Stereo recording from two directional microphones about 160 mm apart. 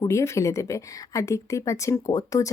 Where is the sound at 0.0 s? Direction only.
20° left (ahead or behind).